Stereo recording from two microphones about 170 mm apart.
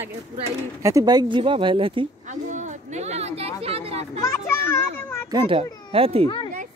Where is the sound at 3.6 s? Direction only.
35° right (ahead or behind).